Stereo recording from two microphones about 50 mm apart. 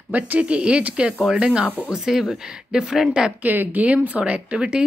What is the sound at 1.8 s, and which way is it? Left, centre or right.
Speech, centre.